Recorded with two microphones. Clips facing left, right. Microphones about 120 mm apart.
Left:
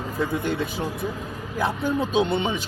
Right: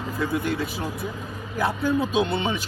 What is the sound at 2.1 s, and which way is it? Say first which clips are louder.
Speech: left 1 dB; 20° left (ahead or behind).